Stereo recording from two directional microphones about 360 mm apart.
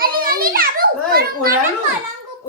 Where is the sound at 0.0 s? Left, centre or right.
Right.